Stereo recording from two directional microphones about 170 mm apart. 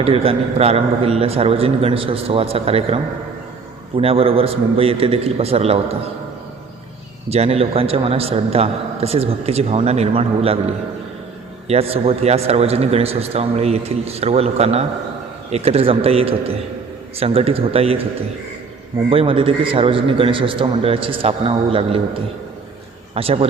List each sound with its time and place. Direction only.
0.0 s a man's voice: 35° right (ahead or behind)
7.3 s a man's voice: 35° right (ahead or behind)
19.1 s a man's voice: 30° right (ahead or behind)